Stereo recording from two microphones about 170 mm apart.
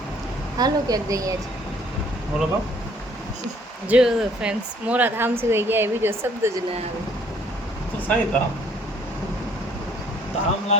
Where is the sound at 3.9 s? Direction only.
5° right (ahead or behind).